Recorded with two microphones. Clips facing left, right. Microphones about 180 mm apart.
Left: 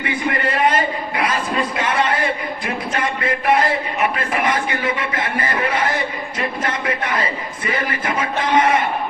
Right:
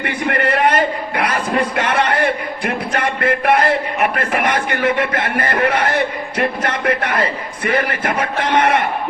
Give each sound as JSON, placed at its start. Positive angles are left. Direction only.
{"t": 0.0, "sound": "a man's voice", "side_deg": -65}